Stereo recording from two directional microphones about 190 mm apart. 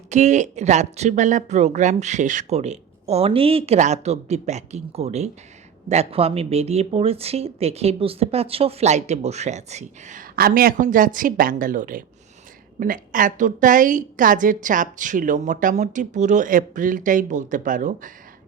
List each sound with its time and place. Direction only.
0.1 s a woman's voice: 40° right (ahead or behind)